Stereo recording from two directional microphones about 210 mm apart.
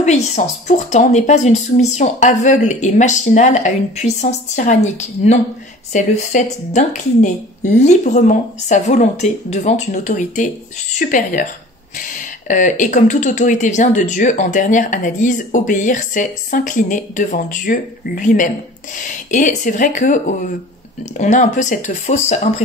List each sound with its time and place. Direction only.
0.0 s speech: 30° left (ahead or behind)